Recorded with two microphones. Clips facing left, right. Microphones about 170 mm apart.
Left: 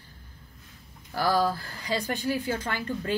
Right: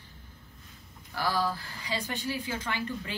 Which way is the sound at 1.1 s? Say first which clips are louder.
Left 5 dB; 45° left (ahead or behind).